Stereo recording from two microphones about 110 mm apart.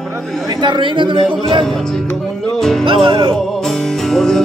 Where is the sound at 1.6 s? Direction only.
5° left (ahead or behind).